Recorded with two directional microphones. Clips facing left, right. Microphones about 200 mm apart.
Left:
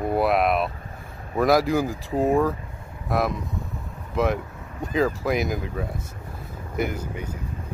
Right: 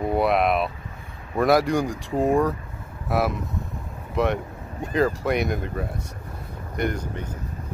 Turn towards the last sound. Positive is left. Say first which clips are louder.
# right 1 dB
turn(degrees=10)  # may be behind; listen again after turning